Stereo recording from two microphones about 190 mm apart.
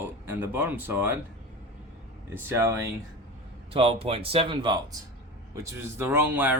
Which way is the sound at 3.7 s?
30° right (ahead or behind).